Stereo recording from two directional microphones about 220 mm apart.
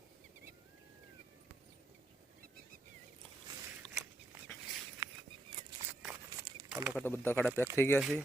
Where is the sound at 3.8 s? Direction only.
5° right (ahead or behind).